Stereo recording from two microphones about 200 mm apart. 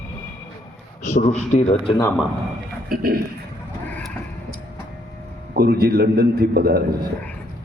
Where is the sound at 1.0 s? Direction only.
35° left (ahead or behind).